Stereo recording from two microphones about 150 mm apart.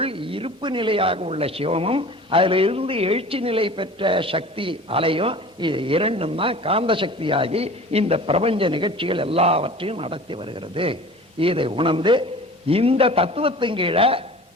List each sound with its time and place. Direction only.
0.0 s speech: 35° right (ahead or behind)